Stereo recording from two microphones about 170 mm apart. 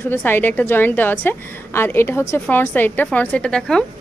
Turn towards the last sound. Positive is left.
turn(degrees=5)  # may be behind; listen again after turning